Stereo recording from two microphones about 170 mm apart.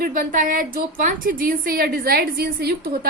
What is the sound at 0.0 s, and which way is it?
A woman's voice, 55° right (ahead or behind).